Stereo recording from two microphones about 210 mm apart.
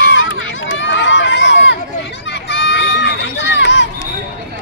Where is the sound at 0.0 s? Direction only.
65° left (ahead or behind).